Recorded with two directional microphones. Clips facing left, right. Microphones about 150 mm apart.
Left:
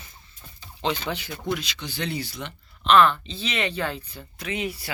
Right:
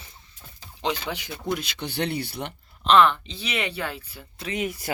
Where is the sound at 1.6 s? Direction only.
55° right (ahead or behind).